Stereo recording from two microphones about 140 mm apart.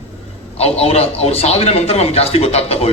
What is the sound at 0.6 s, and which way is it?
A man's voice, 45° left (ahead or behind).